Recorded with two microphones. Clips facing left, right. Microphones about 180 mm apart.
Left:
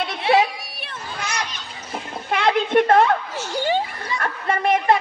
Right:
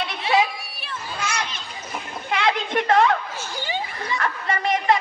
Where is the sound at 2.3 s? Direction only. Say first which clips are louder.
Left 5 dB; 50° left (ahead or behind).